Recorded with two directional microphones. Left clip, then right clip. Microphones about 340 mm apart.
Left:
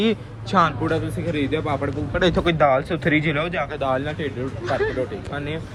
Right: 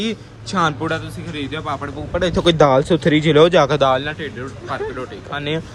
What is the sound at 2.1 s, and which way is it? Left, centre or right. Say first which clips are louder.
Speech: right 5 dB; centre.